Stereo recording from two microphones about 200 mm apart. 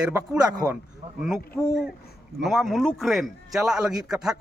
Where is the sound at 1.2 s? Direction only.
Centre (ahead or behind).